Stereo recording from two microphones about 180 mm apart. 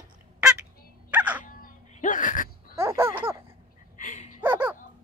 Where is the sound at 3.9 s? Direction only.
45° left (ahead or behind).